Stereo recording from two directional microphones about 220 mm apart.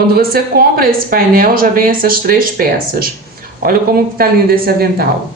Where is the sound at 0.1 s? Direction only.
45° right (ahead or behind).